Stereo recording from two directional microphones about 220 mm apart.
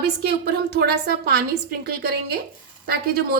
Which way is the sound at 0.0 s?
45° right (ahead or behind).